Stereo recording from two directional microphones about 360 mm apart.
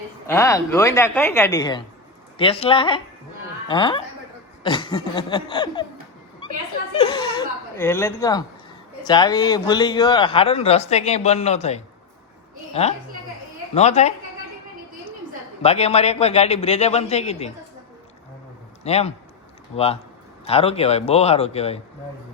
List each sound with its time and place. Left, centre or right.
0.3 s a man's voice: centre
6.9 s a man's voice: centre
15.6 s a man's voice: centre
18.8 s a man's voice: centre